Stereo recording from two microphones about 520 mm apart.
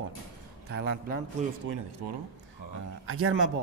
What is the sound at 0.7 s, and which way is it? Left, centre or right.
Speech, centre.